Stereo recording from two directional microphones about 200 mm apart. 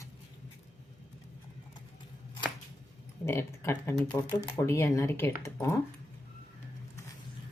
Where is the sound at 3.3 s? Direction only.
10° left (ahead or behind).